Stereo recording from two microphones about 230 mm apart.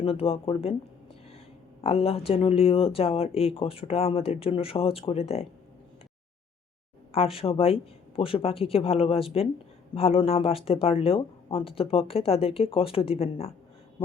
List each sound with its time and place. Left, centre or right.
0.0 s speech: left
1.8 s speech: left
7.3 s speech: left